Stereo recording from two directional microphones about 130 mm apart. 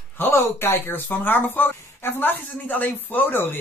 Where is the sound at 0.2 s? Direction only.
20° left (ahead or behind).